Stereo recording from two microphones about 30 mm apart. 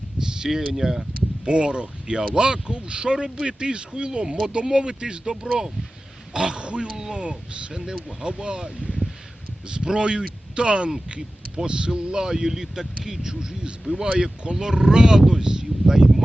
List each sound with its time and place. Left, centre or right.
0.2 s a sound: right
0.4 s speech: centre
1.5 s speech: right
6.8 s speech: centre
7.2 s speech: right
7.8 s speech: centre
8.3 s speech: right
13.9 s speech: right
14.6 s speech: centre